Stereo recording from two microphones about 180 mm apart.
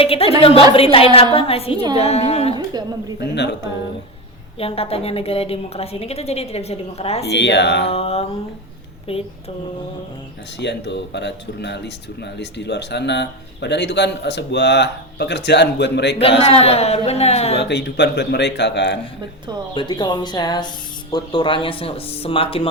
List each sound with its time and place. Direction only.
0.0 s a woman's voice: 30° left (ahead or behind)
2.6 s a woman's voice: 25° right (ahead or behind)
4.5 s a woman's voice: 30° left (ahead or behind)
7.3 s speech: 75° left (ahead or behind)
7.9 s a woman's voice: 35° left (ahead or behind)
10.6 s speech: 75° left (ahead or behind)
16.4 s a woman's voice: 35° left (ahead or behind)
17.6 s speech: 70° left (ahead or behind)
19.7 s a woman's voice: 25° left (ahead or behind)